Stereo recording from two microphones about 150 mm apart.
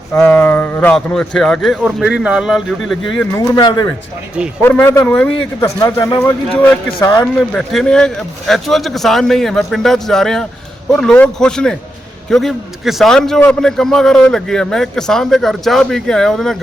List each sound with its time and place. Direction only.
0.1 s a man's voice: 5° left (ahead or behind)
3.3 s speech: 25° left (ahead or behind)
4.6 s speech: 15° left (ahead or behind)
5.6 s speech: 25° left (ahead or behind)
7.3 s a man's voice: 5° left (ahead or behind)